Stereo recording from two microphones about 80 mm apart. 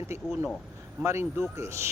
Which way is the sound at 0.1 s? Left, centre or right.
Right.